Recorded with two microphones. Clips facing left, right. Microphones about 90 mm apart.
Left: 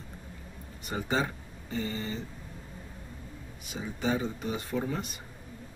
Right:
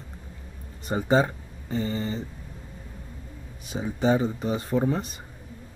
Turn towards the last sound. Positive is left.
turn(degrees=-35)  # may be behind; listen again after turning